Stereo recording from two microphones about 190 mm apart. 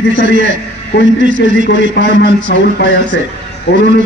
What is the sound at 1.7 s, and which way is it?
A man's voice, 70° left (ahead or behind).